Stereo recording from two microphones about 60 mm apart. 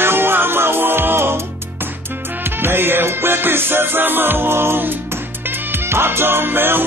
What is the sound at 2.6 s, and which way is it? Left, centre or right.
Music, right.